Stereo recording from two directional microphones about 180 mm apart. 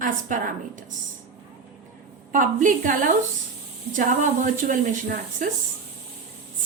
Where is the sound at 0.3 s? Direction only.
45° right (ahead or behind).